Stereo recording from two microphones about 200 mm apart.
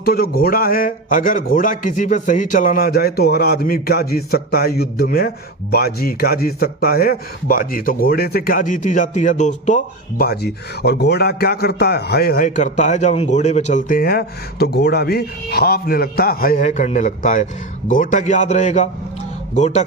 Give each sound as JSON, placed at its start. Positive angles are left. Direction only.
{"t": 0.0, "sound": "speech", "side_deg": 50}